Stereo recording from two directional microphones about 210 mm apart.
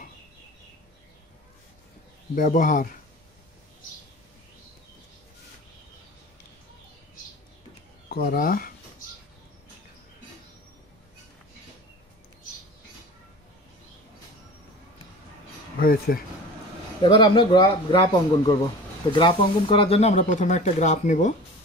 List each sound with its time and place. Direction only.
2.3 s speech: 40° left (ahead or behind)
8.1 s speech: 45° left (ahead or behind)
15.8 s speech: 45° left (ahead or behind)
17.0 s speech: 20° left (ahead or behind)